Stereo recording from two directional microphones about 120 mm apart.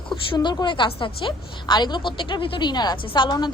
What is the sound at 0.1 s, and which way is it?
A woman's voice, 40° left (ahead or behind).